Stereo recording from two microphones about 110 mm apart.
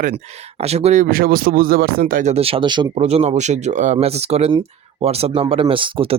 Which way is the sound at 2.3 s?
60° right (ahead or behind).